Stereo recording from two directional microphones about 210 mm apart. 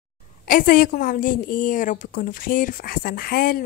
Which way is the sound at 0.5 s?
40° left (ahead or behind).